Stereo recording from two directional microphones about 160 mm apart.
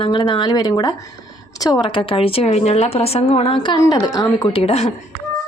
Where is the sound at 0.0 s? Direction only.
30° left (ahead or behind).